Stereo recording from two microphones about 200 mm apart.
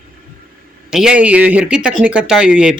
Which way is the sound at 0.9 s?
5° right (ahead or behind).